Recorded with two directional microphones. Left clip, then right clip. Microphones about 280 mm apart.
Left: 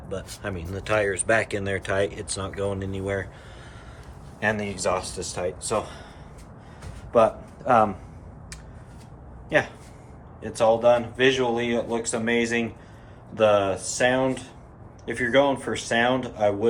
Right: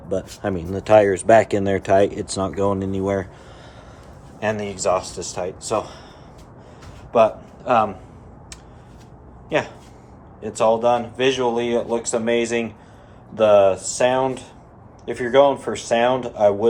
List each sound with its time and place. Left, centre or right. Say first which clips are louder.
0.1 s speech: right 8 dB; centre
4.4 s speech: right 2 dB; centre
7.1 s speech: right 3 dB; centre
10.6 s speech: right 2 dB; centre